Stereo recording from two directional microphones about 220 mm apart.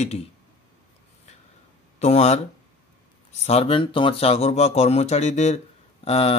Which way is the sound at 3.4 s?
25° left (ahead or behind).